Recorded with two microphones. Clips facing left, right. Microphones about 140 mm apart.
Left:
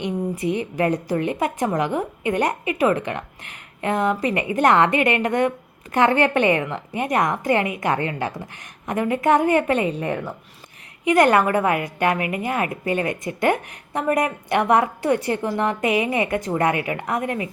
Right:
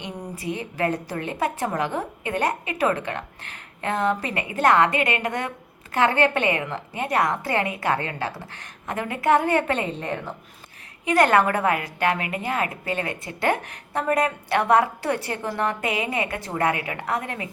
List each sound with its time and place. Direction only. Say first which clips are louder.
0.0 s a woman's voice: left 8 dB; 20° left (ahead or behind)